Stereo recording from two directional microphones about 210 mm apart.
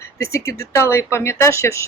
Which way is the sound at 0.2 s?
15° left (ahead or behind).